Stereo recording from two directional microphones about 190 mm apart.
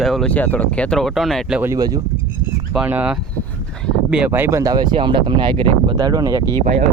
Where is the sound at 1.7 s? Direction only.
20° right (ahead or behind).